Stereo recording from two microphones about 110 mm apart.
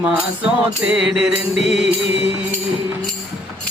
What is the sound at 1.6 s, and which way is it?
Music, 75° left (ahead or behind).